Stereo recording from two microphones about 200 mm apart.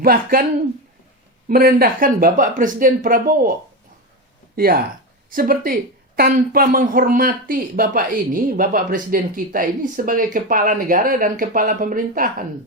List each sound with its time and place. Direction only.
0.0 s speech: 45° right (ahead or behind)
1.5 s speech: 45° right (ahead or behind)
4.5 s speech: 50° right (ahead or behind)